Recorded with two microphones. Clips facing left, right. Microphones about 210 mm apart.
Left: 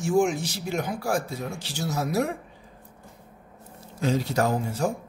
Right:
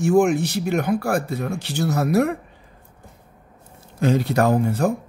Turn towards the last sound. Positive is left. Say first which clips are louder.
# right 7 dB
turn(degrees=-60)  # may be behind; listen again after turning